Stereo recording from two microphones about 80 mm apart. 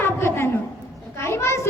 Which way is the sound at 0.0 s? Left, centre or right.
Left.